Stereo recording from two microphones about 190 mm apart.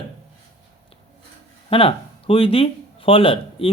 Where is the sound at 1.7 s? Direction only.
30° left (ahead or behind).